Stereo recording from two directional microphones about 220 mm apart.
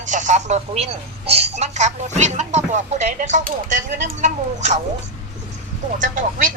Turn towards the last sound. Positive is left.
turn(degrees=-35)  # may be behind; listen again after turning